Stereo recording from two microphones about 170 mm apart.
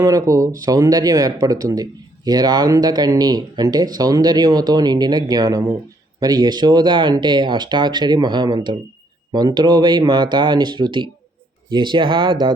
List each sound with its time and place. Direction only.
0.0 s speech: 20° right (ahead or behind)